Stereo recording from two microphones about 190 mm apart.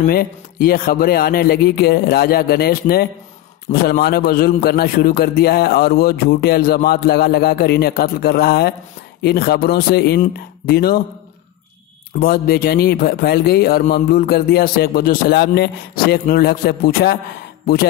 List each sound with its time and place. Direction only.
0.1 s a man's voice: 50° left (ahead or behind)
12.2 s a man's voice: 50° left (ahead or behind)